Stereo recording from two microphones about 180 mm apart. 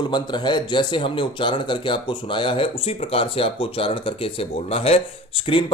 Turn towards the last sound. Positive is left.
turn(degrees=30)  # may be behind; listen again after turning